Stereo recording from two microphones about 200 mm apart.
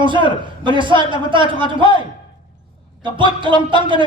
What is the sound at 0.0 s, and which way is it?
A man's voice, 25° right (ahead or behind).